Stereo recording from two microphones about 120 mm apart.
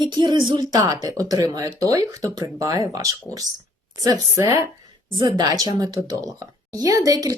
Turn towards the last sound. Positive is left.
turn(degrees=-30)  # may be behind; listen again after turning